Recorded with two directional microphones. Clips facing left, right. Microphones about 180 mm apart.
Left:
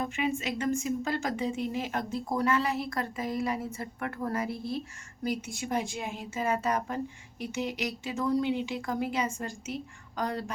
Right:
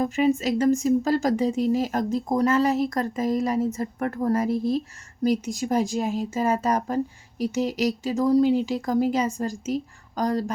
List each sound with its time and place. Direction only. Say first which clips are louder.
0.0 s speech: right 9 dB; 40° right (ahead or behind)
4.5 s speech: right 11 dB; 90° right
5.2 s speech: right 9 dB; 40° right (ahead or behind)